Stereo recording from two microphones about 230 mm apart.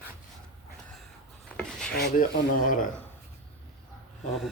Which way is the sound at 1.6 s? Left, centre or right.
Centre.